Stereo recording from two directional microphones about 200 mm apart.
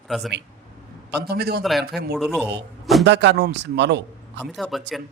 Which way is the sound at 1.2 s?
50° right (ahead or behind).